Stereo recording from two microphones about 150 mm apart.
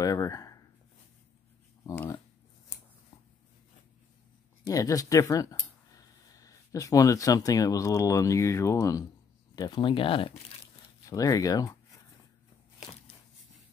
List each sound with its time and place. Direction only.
0.0 s a sound: 25° left (ahead or behind)
1.9 s speech: 20° left (ahead or behind)
4.6 s speech: 25° left (ahead or behind)
9.6 s speech: 30° left (ahead or behind)
11.1 s speech: 25° left (ahead or behind)